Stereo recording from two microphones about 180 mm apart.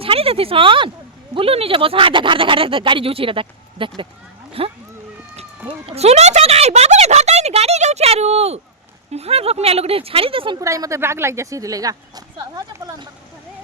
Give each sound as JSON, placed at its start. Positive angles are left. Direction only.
{"t": 0.0, "sound": "speech", "side_deg": -30}
{"t": 5.8, "sound": "speech", "side_deg": -35}
{"t": 10.6, "sound": "speech", "side_deg": -15}